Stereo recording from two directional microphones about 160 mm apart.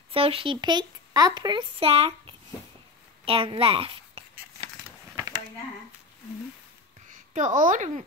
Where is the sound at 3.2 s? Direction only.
35° right (ahead or behind).